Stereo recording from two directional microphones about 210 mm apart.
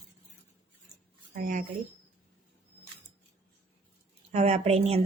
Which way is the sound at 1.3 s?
40° right (ahead or behind).